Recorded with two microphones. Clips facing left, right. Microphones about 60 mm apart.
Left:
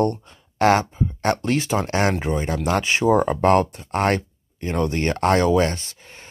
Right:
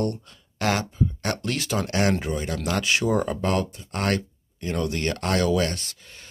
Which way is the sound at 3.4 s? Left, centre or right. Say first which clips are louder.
Left 8 dB; left.